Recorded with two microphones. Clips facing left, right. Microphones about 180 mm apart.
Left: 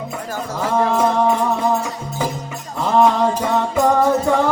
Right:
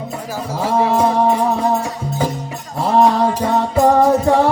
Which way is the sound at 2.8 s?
35° right (ahead or behind).